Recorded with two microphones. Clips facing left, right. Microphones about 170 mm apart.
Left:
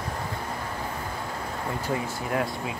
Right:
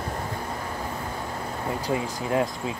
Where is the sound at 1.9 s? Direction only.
25° right (ahead or behind).